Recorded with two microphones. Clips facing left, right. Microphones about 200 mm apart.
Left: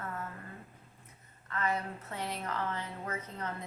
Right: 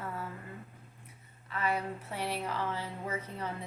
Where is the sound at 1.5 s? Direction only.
10° right (ahead or behind).